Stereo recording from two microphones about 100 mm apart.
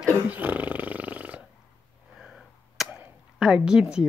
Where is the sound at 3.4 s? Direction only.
5° right (ahead or behind).